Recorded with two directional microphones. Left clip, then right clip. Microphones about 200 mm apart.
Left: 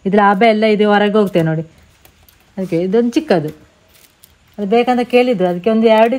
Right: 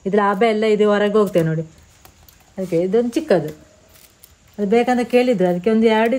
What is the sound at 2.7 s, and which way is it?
Speech, 40° left (ahead or behind).